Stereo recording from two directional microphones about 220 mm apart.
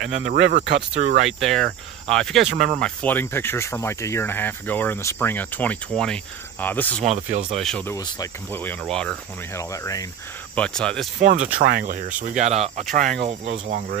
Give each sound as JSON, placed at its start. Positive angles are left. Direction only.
{"t": 0.3, "sound": "speech", "side_deg": -45}
{"t": 1.4, "sound": "speech", "side_deg": 5}
{"t": 7.1, "sound": "speech", "side_deg": -30}
{"t": 7.6, "sound": "speech", "side_deg": 5}
{"t": 9.6, "sound": "speech", "side_deg": 15}
{"t": 11.1, "sound": "speech", "side_deg": -35}
{"t": 12.9, "sound": "speech", "side_deg": -40}